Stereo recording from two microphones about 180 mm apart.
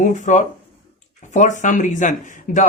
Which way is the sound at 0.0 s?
45° left (ahead or behind).